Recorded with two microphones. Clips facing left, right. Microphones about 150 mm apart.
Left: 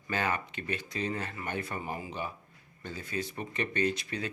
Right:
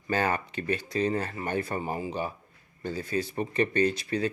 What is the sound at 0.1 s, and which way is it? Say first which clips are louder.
Speech: right 5 dB; 40° right (ahead or behind).